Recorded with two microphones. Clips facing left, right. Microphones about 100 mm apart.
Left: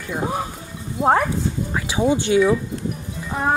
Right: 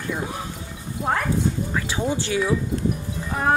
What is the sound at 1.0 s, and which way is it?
Speech, 35° left (ahead or behind).